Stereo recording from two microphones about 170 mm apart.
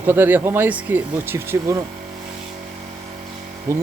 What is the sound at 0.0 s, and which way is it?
Speech, 10° right (ahead or behind).